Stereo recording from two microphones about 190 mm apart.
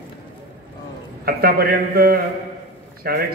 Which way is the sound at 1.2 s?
55° right (ahead or behind).